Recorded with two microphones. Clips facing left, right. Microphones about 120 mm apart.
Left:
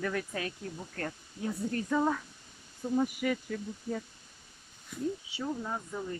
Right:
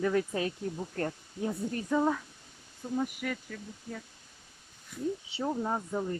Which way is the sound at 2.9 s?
5° left (ahead or behind).